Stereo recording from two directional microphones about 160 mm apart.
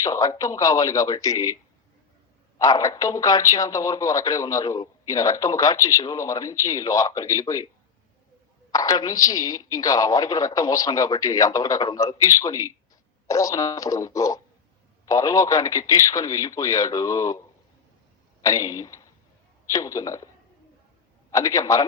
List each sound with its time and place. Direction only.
0.0 s speech: 20° left (ahead or behind)
2.6 s speech: 20° left (ahead or behind)
8.7 s speech: 20° left (ahead or behind)
18.4 s a man's voice: 20° left (ahead or behind)